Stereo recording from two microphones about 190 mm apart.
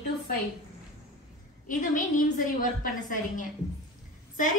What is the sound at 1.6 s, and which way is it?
A woman's voice, 45° left (ahead or behind).